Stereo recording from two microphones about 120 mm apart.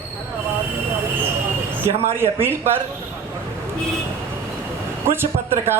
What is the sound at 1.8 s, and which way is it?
Speech, 20° right (ahead or behind).